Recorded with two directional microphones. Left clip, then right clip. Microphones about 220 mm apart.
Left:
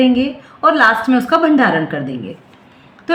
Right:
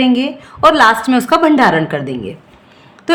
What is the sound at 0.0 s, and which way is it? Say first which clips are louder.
A woman's voice: even; 55° right (ahead or behind).